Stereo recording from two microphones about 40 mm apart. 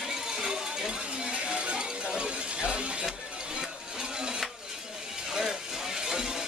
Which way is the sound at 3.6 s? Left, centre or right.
Centre.